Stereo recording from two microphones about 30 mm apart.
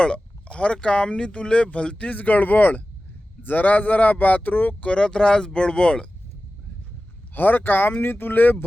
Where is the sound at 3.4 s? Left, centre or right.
Left.